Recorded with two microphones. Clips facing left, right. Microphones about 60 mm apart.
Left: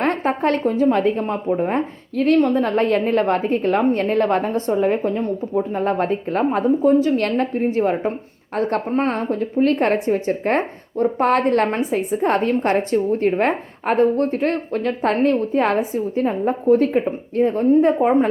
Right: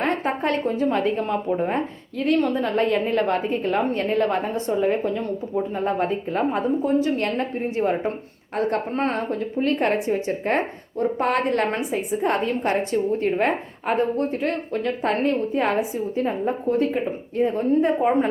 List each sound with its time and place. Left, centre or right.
0.0 s a woman's voice: left